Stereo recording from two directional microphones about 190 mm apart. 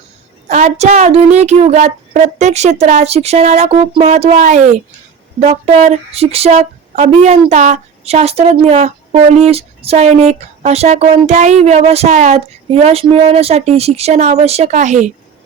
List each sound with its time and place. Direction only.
0.4 s speech: 40° right (ahead or behind)